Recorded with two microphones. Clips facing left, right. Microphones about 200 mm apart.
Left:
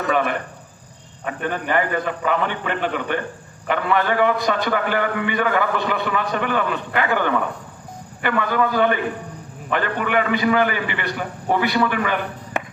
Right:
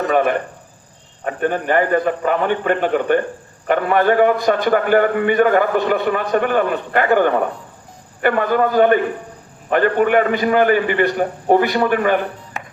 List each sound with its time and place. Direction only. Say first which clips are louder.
0.1 s a man's voice: right 3 dB; 45° right (ahead or behind)